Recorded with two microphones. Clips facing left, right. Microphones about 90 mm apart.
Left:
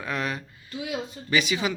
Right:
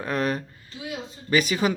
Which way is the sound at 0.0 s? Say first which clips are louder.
Right 4 dB; 40° right (ahead or behind).